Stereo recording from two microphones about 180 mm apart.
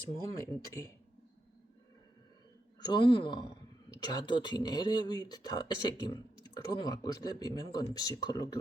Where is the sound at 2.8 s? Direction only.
25° left (ahead or behind).